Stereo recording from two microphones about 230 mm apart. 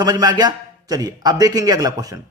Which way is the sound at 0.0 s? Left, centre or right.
Centre.